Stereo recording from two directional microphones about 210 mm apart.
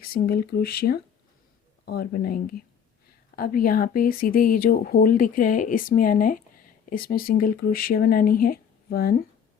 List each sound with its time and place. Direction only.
0.0 s speech: 45° left (ahead or behind)